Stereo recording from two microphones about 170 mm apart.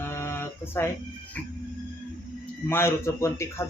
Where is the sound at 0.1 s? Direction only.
15° left (ahead or behind).